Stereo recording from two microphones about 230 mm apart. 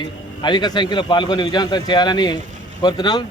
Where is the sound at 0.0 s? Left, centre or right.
Centre.